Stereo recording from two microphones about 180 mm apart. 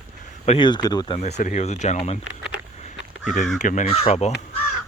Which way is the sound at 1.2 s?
40° left (ahead or behind).